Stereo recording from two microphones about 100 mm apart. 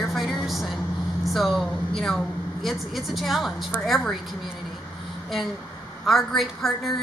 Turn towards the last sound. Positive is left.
turn(degrees=0)  # may be behind; listen again after turning